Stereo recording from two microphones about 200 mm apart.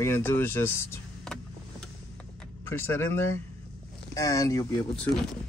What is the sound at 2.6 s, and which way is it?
Speech, 10° left (ahead or behind).